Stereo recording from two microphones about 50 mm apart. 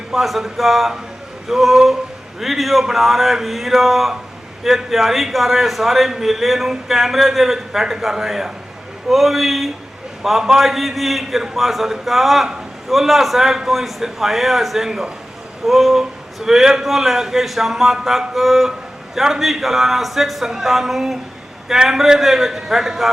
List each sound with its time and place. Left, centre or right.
0.1 s a man's voice: centre